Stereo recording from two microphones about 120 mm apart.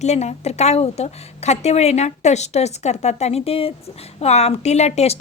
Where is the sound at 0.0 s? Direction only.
70° left (ahead or behind).